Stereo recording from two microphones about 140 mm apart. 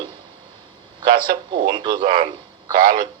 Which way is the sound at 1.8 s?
80° right.